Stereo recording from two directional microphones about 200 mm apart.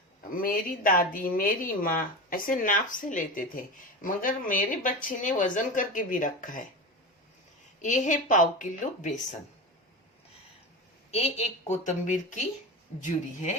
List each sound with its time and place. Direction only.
0.4 s a woman's voice: 45° left (ahead or behind)
7.8 s speech: 40° left (ahead or behind)
11.1 s speech: 30° left (ahead or behind)